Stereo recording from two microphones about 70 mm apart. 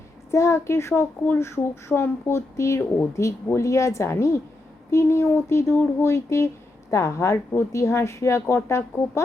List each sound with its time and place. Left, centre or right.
0.3 s speech: left
1.2 s speech: left
1.5 s a woman's voice: left